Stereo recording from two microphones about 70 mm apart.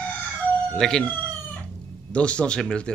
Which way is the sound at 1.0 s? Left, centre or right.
Centre.